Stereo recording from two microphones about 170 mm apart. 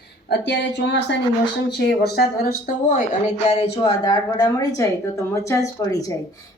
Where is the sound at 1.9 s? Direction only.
70° left (ahead or behind).